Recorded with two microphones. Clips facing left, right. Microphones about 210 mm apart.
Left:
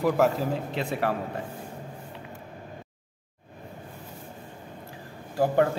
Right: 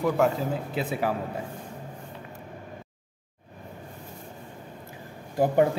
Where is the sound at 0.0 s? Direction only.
Centre (ahead or behind).